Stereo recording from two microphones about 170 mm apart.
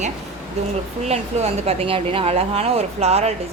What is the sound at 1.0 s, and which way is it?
Speech, 35° right (ahead or behind).